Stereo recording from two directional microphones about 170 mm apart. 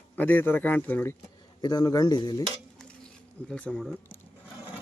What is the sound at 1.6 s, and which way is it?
Speech, 25° left (ahead or behind).